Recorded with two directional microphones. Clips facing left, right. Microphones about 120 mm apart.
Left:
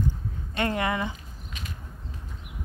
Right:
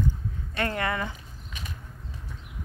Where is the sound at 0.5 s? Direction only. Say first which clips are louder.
Left 2 dB; 25° left (ahead or behind).